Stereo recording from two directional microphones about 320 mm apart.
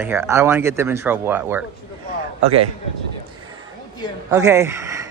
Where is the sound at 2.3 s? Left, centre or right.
Right.